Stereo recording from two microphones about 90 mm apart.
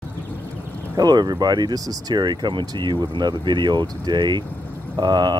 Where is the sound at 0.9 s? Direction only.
50° right (ahead or behind).